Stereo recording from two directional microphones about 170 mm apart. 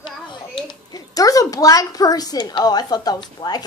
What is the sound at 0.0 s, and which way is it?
A child's voice, 25° left (ahead or behind).